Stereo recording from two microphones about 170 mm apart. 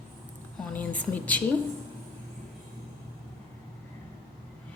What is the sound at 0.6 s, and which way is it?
Speech, 10° left (ahead or behind).